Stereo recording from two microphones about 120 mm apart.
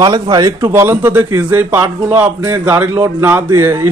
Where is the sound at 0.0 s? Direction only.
35° right (ahead or behind).